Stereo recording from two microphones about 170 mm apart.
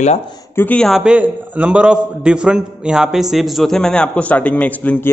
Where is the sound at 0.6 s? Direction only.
5° left (ahead or behind).